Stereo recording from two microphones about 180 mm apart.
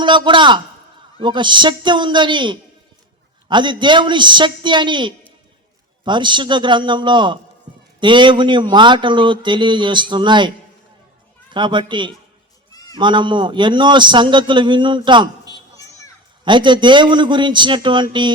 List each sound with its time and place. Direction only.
0.0 s speech: 25° right (ahead or behind)
11.5 s speech: 25° right (ahead or behind)